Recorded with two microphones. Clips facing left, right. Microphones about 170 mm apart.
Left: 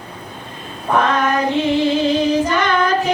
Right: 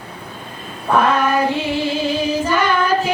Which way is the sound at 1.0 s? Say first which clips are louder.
Right 1 dB; 10° right (ahead or behind).